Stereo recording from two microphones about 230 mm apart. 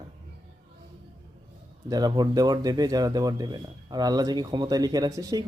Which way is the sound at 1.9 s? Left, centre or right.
Centre.